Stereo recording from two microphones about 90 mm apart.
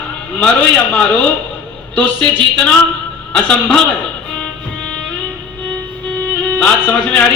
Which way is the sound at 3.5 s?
10° left (ahead or behind).